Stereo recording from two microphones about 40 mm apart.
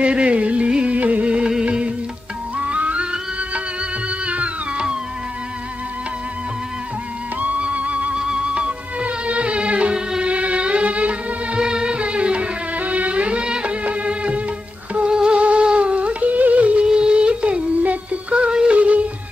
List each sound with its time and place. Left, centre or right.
0.0 s music: right
0.9 s music: right
2.6 s music: right
4.3 s music: right
7.3 s music: right
8.2 s music: right
11.6 s music: right
15.0 s music: right
16.8 s music: right